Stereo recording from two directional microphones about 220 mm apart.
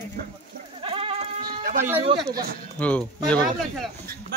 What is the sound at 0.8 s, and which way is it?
Sheep, 25° right (ahead or behind).